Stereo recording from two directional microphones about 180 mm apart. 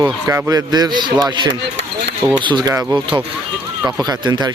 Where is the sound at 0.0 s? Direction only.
15° right (ahead or behind).